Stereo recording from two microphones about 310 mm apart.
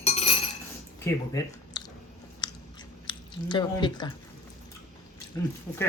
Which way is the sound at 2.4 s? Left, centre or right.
Centre.